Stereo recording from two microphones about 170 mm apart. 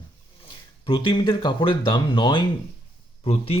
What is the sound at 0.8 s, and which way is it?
Speech, 30° left (ahead or behind).